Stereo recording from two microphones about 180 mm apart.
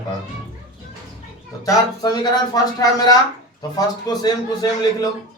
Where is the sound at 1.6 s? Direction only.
20° left (ahead or behind).